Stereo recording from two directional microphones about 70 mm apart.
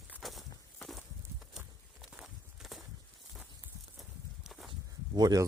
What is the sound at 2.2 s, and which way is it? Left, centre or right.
Walk, centre.